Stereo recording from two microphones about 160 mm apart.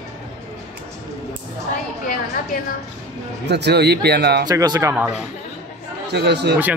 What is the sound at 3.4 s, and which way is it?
Speech, 90° right.